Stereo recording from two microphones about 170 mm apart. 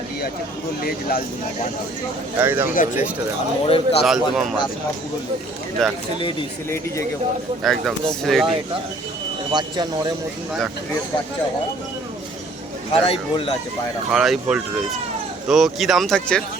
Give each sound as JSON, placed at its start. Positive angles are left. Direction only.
{"t": 0.8, "sound": "speech", "side_deg": 60}
{"t": 2.4, "sound": "speech", "side_deg": -10}
{"t": 2.7, "sound": "speech", "side_deg": 45}
{"t": 3.7, "sound": "speech", "side_deg": 35}
{"t": 4.0, "sound": "speech", "side_deg": 0}
{"t": 5.8, "sound": "speech", "side_deg": 0}
{"t": 7.6, "sound": "speech", "side_deg": 0}
{"t": 9.5, "sound": "speech", "side_deg": -25}
{"t": 12.9, "sound": "speech", "side_deg": 35}
{"t": 14.1, "sound": "speech", "side_deg": -5}